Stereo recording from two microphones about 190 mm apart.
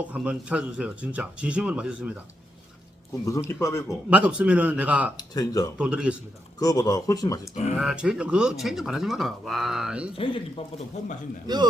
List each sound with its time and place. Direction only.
0.1 s speech: 5° right (ahead or behind)
3.2 s speech: 15° left (ahead or behind)
4.1 s speech: 5° right (ahead or behind)
5.1 s speech: 20° left (ahead or behind)
5.7 s speech: 5° right (ahead or behind)
6.6 s speech: 20° left (ahead or behind)
7.5 s speech: 35° left (ahead or behind)
7.8 s speech: 5° right (ahead or behind)
10.2 s speech: 25° left (ahead or behind)
11.5 s speech: 20° right (ahead or behind)